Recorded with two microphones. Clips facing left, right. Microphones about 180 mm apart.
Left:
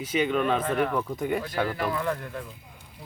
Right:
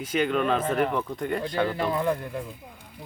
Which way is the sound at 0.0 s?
5° left (ahead or behind).